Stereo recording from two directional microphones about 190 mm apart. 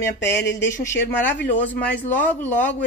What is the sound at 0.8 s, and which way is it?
Speech, 10° left (ahead or behind).